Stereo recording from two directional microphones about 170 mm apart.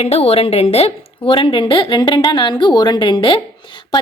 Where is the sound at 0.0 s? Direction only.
35° left (ahead or behind).